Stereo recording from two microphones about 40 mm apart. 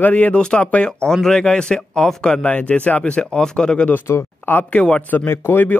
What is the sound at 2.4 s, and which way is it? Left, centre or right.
Speech, left.